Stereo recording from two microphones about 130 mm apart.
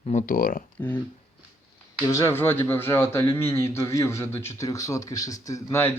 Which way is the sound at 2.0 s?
25° left (ahead or behind).